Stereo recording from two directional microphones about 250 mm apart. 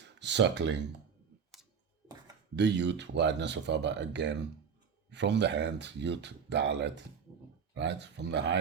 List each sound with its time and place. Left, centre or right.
0.0 s speech: right
2.6 s speech: right